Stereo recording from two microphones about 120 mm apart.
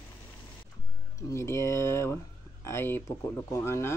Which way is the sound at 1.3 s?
25° left (ahead or behind).